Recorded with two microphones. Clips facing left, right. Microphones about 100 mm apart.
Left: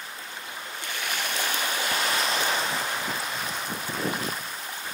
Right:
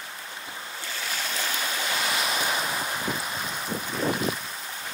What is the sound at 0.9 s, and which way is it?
Boat, 60° left (ahead or behind).